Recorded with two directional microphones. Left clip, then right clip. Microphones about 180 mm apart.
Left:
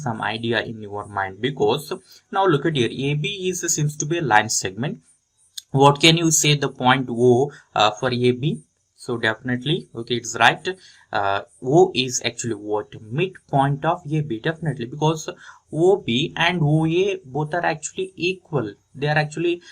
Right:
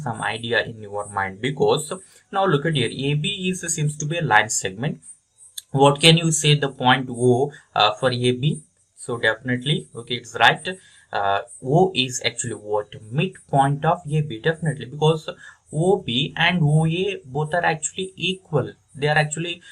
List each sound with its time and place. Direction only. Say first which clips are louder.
0.0 s speech: left 1 dB; 25° left (ahead or behind)